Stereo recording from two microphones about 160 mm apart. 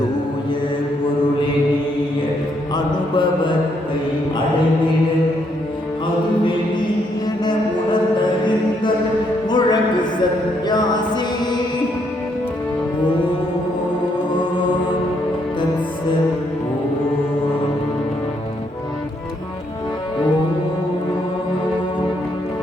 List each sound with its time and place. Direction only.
2.7 s mantra: 30° left (ahead or behind)
9.5 s music: 25° left (ahead or behind)